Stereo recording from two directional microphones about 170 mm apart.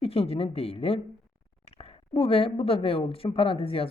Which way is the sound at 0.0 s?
35° left (ahead or behind).